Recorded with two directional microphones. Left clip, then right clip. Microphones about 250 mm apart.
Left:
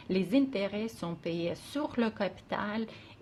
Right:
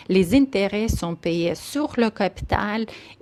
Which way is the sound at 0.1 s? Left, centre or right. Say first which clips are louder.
Right 11 dB; right.